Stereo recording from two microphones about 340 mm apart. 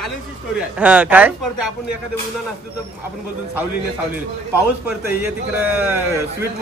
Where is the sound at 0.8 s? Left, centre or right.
Centre.